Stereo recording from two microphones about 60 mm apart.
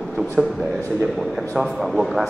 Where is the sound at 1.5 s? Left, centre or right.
Centre.